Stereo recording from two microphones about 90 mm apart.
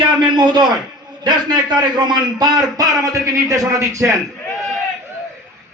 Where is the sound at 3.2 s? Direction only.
40° right (ahead or behind).